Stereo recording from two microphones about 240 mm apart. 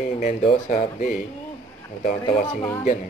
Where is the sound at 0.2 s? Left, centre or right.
Left.